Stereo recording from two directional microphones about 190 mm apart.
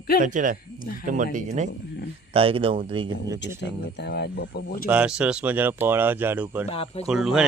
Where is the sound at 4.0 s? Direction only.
65° left (ahead or behind).